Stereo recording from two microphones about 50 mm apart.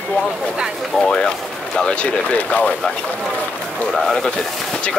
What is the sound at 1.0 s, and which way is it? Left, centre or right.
Speech, centre.